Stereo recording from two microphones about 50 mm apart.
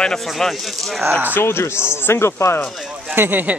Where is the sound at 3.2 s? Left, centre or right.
Right.